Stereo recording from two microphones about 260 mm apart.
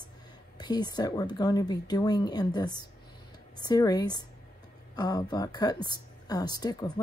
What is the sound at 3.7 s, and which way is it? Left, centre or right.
Speech, centre.